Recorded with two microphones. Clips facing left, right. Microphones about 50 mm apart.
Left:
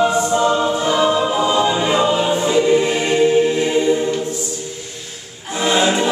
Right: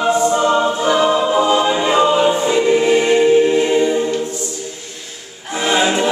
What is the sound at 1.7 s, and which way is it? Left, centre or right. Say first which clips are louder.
Music: right 1 dB; right.